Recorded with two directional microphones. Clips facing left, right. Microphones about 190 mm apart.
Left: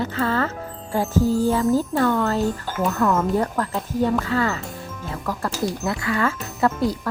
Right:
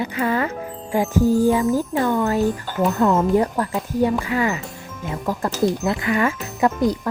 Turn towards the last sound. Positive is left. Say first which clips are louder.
# right 2 dB
turn(degrees=-15)  # may be behind; listen again after turning